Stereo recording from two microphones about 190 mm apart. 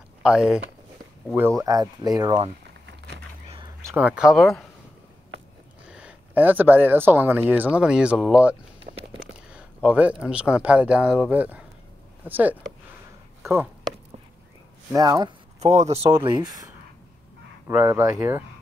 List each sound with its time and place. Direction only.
0.2 s speech: 5° right (ahead or behind)
1.6 s speech: 20° right (ahead or behind)
3.4 s a sound: 30° right (ahead or behind)
3.8 s speech: 10° right (ahead or behind)
5.9 s speech: 5° right (ahead or behind)
9.8 s speech: 5° right (ahead or behind)
14.9 s speech: 20° right (ahead or behind)
15.6 s speech: 35° right (ahead or behind)
16.2 s speech: 20° right (ahead or behind)